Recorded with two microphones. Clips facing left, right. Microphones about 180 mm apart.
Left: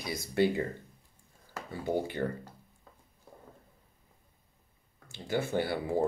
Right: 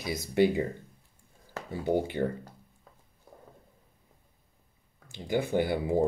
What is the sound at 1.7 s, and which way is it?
Speech, 20° right (ahead or behind).